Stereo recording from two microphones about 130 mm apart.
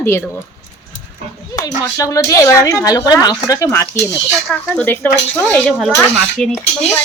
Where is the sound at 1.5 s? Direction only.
25° left (ahead or behind); by 6.6 s 5° left (ahead or behind).